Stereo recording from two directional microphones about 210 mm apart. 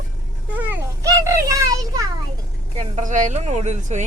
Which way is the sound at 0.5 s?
10° right (ahead or behind).